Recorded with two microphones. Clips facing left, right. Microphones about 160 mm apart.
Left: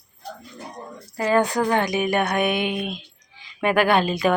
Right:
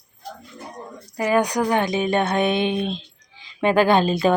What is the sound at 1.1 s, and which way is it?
A woman's voice, 15° right (ahead or behind).